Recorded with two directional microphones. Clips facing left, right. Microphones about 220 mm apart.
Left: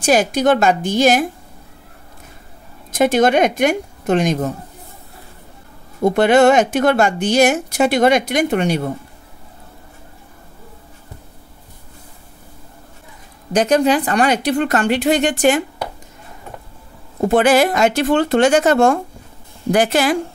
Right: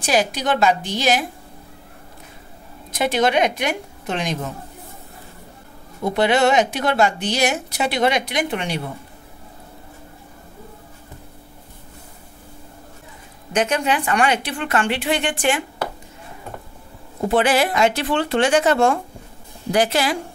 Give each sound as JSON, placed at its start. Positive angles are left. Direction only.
{"t": 0.0, "sound": "a woman's voice", "side_deg": 45}
{"t": 2.9, "sound": "a woman's voice", "side_deg": 45}
{"t": 6.0, "sound": "a woman's voice", "side_deg": 50}
{"t": 13.5, "sound": "a woman's voice", "side_deg": 35}
{"t": 17.3, "sound": "a woman's voice", "side_deg": 45}